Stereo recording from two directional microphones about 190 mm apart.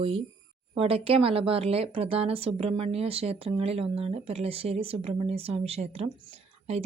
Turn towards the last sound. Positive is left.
turn(degrees=-35)  # may be behind; listen again after turning